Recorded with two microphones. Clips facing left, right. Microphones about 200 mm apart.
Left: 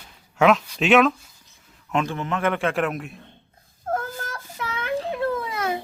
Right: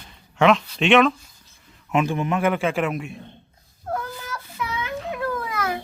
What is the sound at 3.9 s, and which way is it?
Child singing, 45° left (ahead or behind).